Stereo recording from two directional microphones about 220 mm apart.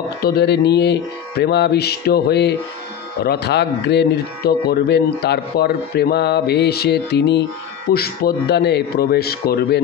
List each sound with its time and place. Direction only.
0.2 s speech: 45° left (ahead or behind)